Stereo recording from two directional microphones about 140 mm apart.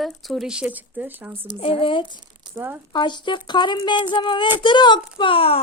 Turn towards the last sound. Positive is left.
turn(degrees=40)  # may be behind; listen again after turning